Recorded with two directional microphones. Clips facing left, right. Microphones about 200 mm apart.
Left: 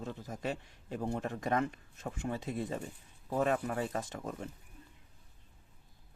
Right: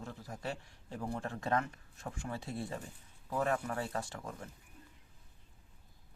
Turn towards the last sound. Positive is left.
turn(degrees=20)  # may be behind; listen again after turning